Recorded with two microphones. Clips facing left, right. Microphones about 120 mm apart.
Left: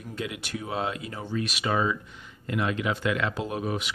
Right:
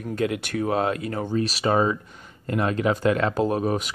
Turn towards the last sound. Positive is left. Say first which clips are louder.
# right 7 dB
turn(degrees=-40)  # may be behind; listen again after turning